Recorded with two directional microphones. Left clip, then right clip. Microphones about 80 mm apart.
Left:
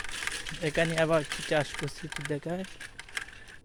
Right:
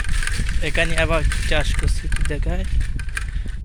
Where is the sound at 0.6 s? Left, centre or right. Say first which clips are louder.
Right 6 dB; left.